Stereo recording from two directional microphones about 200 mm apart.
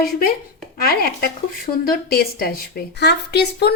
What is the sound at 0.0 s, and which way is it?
A woman's voice, 50° left (ahead or behind).